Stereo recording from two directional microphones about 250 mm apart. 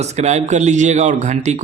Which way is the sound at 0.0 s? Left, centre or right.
Right.